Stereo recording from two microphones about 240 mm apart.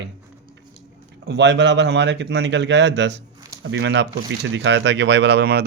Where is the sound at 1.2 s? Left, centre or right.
Right.